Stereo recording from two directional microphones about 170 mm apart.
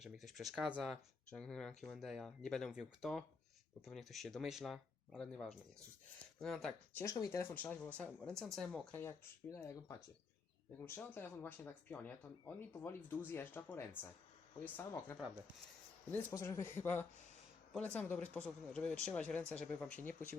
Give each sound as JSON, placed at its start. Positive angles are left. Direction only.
{"t": 0.0, "sound": "speech", "side_deg": 0}
{"t": 6.9, "sound": "speech", "side_deg": 20}
{"t": 9.0, "sound": "speech", "side_deg": 15}